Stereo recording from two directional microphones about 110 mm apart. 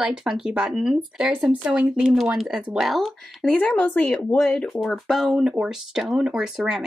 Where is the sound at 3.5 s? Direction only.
15° left (ahead or behind).